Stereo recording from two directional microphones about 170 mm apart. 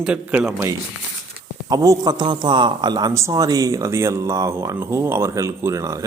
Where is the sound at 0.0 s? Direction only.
5° right (ahead or behind).